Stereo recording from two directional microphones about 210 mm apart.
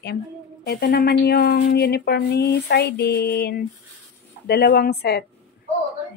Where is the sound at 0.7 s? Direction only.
50° left (ahead or behind).